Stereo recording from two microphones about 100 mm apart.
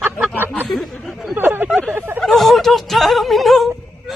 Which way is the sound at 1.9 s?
20° right (ahead or behind).